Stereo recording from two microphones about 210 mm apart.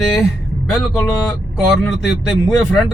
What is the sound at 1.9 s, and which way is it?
Speech, centre (ahead or behind).